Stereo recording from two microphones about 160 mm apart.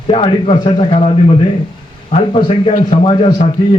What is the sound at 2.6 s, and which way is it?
Speech, 45° left (ahead or behind).